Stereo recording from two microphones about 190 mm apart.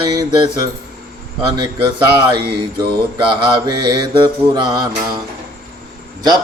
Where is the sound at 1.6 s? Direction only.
25° right (ahead or behind).